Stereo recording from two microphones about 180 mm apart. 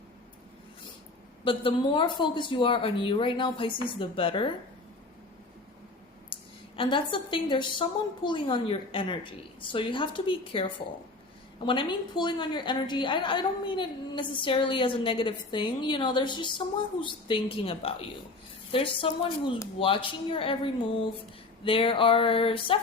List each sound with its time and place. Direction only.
1.5 s a woman's voice: 30° left (ahead or behind)
6.3 s a woman's voice: 30° left (ahead or behind)
21.6 s a woman's voice: 30° left (ahead or behind)